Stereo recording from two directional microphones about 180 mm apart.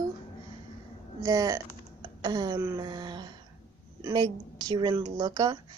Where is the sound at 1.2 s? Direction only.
20° right (ahead or behind).